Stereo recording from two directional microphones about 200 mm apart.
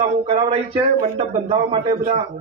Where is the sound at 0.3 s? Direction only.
25° right (ahead or behind).